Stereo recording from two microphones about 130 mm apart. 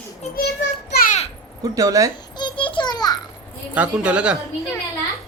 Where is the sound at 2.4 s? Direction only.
35° left (ahead or behind).